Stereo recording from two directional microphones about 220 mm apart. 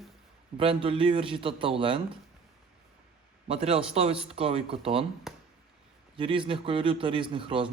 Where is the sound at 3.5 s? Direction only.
25° right (ahead or behind).